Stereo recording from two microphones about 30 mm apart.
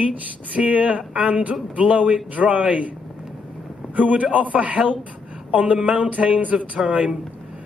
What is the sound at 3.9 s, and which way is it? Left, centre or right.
Speech, right.